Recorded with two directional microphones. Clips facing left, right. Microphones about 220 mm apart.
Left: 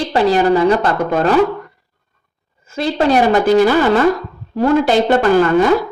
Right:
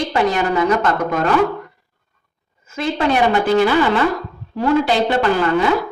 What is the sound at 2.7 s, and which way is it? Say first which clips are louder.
A woman's voice: left 4 dB; 35° left (ahead or behind).